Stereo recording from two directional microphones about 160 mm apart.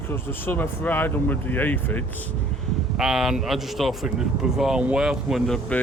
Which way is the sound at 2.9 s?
Centre (ahead or behind).